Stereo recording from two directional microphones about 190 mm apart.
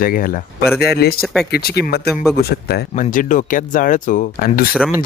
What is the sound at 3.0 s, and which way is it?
Speech, 40° left (ahead or behind).